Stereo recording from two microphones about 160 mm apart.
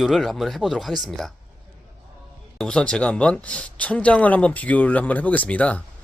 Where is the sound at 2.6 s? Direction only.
5° left (ahead or behind).